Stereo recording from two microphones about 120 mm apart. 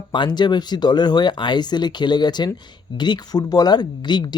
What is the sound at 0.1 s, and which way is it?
Speech, 40° left (ahead or behind).